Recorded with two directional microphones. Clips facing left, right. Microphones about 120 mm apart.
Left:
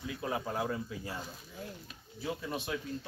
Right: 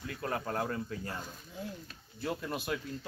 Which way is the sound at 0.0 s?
10° left (ahead or behind).